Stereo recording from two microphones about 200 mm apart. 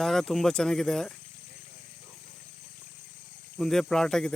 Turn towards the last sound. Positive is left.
turn(degrees=5)  # may be behind; listen again after turning